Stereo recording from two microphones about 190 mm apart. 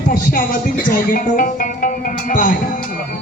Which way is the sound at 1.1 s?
45° left (ahead or behind).